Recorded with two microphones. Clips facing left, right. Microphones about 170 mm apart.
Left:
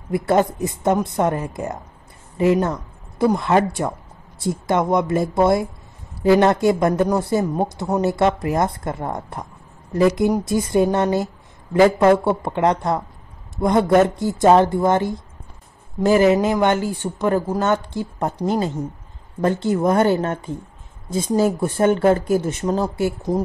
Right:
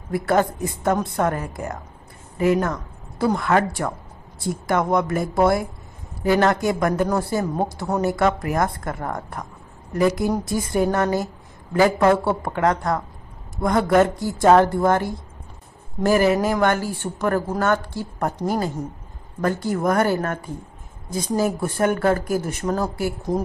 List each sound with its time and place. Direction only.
0.1 s a woman's voice: 20° left (ahead or behind)